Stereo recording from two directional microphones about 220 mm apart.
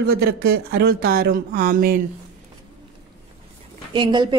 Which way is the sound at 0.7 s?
45° right (ahead or behind).